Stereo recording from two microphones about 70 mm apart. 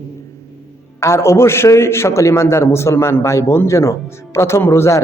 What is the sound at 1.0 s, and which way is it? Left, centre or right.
A man's voice, left.